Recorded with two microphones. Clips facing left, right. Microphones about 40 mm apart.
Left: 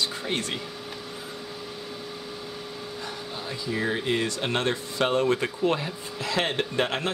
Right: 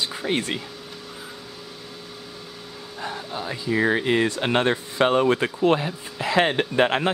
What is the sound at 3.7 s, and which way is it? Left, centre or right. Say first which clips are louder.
Speech: right 7 dB; right.